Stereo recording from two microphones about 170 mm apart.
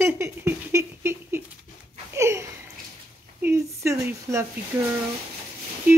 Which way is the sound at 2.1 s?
15° right (ahead or behind).